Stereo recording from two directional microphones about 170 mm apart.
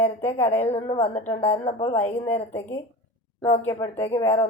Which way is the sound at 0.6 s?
40° left (ahead or behind).